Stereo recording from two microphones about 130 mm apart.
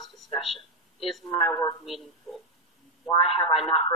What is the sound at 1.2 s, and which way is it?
Speech, 45° left (ahead or behind).